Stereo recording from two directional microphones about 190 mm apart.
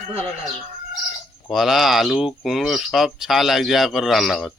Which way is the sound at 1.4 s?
Centre (ahead or behind).